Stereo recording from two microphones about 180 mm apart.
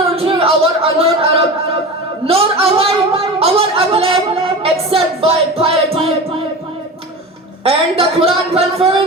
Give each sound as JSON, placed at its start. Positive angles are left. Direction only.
{"t": 0.2, "sound": "a sound", "side_deg": -30}
{"t": 4.6, "sound": "music", "side_deg": -30}
{"t": 7.6, "sound": "speech", "side_deg": -35}